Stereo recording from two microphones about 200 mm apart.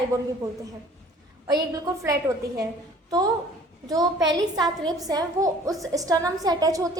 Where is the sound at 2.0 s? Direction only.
15° right (ahead or behind).